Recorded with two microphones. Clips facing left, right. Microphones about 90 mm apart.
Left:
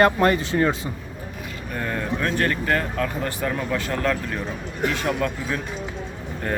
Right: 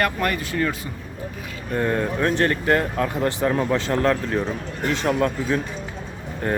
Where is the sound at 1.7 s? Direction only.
20° right (ahead or behind).